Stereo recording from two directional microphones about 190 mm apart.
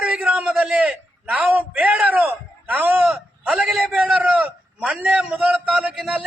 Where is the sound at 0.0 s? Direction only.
5° right (ahead or behind).